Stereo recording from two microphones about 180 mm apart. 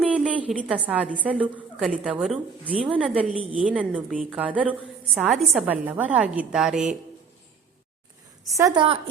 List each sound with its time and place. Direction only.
0.0 s a sound: 5° right (ahead or behind)
0.9 s a woman's voice: 5° right (ahead or behind)
8.4 s a woman's voice: 20° right (ahead or behind)